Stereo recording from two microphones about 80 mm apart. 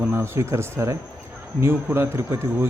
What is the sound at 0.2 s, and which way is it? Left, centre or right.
Speech, right.